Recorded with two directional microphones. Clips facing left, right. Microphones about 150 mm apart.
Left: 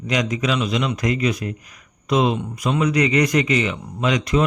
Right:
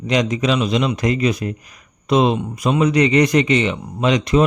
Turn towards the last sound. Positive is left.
turn(degrees=-25)  # may be behind; listen again after turning